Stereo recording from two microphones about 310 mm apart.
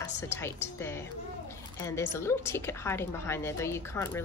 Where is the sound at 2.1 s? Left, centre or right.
Centre.